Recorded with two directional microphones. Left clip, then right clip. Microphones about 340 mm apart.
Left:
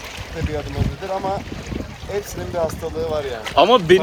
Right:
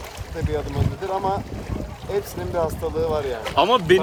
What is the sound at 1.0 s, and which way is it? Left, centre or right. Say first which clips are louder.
Speech: even; centre.